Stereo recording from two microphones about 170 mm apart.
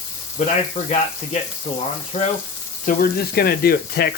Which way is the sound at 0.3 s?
40° left (ahead or behind).